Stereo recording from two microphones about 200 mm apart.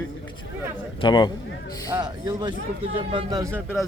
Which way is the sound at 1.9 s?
20° right (ahead or behind).